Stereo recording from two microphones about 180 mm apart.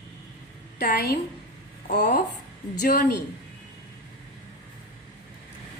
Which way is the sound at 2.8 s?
55° left (ahead or behind).